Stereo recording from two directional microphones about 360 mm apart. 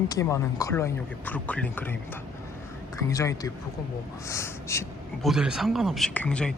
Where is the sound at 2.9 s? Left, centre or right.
Centre.